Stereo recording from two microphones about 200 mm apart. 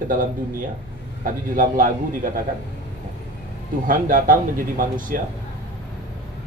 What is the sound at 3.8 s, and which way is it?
Speech, 45° right (ahead or behind).